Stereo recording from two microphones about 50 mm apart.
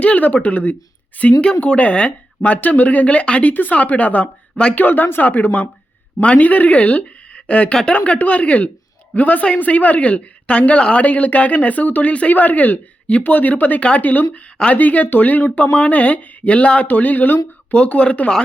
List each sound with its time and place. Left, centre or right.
0.0 s speech: left
1.2 s speech: left
4.8 s speech: left